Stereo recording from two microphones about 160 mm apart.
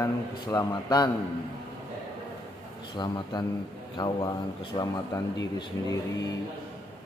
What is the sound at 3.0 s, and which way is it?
Speech, 25° left (ahead or behind).